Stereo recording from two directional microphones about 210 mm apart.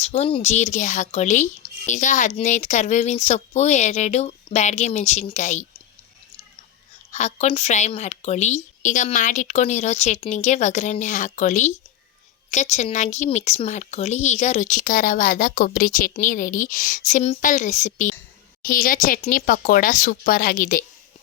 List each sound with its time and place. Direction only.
0.0 s speech: 30° left (ahead or behind)
7.1 s speech: 35° left (ahead or behind)